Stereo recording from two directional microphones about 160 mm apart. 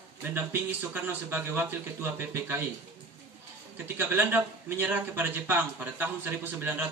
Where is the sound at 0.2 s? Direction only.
10° right (ahead or behind).